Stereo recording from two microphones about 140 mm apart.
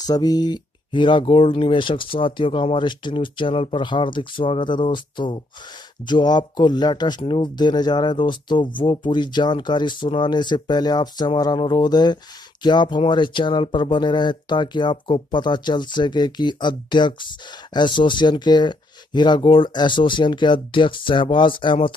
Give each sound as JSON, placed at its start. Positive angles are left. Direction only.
{"t": 0.0, "sound": "speech", "side_deg": 25}